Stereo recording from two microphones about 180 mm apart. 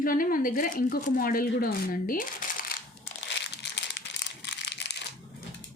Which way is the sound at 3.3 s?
70° left (ahead or behind).